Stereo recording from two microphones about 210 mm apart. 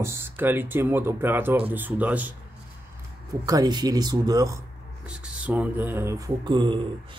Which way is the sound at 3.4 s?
15° right (ahead or behind).